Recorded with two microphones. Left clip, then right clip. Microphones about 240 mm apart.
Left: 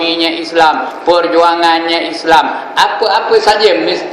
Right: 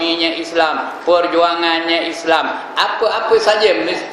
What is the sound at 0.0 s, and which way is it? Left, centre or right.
A man's voice, centre.